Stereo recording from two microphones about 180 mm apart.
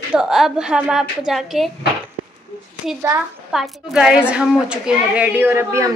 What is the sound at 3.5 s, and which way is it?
A woman's voice, 5° right (ahead or behind).